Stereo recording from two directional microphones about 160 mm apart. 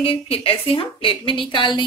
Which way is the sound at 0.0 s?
35° left (ahead or behind).